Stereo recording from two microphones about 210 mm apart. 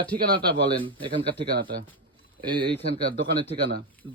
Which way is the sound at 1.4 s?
50° right (ahead or behind).